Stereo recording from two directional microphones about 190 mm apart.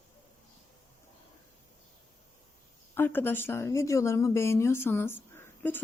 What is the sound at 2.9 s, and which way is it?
Speech, 10° left (ahead or behind).